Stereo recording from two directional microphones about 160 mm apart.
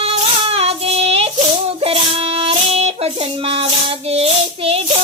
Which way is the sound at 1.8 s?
35° right (ahead or behind).